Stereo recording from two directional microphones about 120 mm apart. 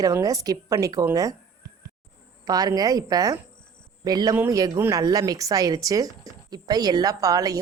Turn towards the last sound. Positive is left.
turn(degrees=-30)  # may be behind; listen again after turning